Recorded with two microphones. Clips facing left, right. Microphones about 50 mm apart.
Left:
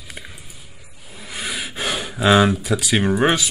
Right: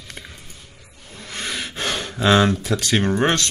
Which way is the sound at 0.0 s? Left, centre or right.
Centre.